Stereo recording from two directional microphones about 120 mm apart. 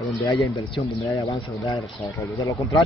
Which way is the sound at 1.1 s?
25° left (ahead or behind).